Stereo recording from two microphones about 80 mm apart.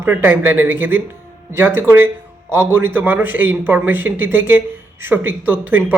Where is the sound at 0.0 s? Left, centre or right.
Right.